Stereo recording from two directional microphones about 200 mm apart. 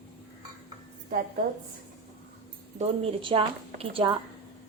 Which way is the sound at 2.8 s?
30° right (ahead or behind).